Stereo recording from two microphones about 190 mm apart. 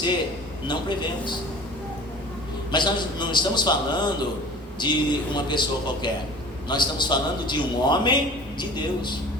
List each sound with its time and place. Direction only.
0.7 s a man's voice: 25° left (ahead or behind)
2.7 s a man's voice: 25° left (ahead or behind)